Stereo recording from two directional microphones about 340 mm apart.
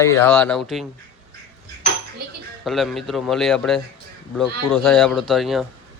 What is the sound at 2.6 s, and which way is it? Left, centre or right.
Speech, centre.